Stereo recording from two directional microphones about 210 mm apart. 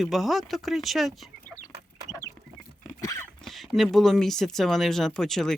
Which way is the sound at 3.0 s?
15° left (ahead or behind).